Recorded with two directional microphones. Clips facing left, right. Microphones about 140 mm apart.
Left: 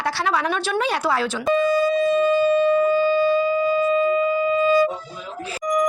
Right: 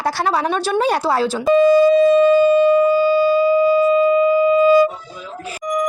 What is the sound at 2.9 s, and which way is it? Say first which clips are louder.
Speech: right 4 dB; 10° right (ahead or behind).